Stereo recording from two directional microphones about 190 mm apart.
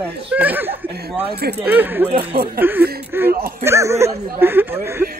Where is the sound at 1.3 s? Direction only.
55° right (ahead or behind).